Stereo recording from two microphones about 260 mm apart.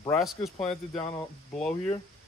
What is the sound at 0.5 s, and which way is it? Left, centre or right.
Speech, left.